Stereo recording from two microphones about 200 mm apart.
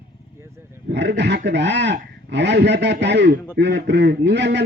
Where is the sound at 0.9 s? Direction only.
60° right (ahead or behind).